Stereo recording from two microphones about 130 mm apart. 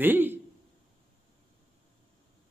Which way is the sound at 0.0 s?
15° right (ahead or behind).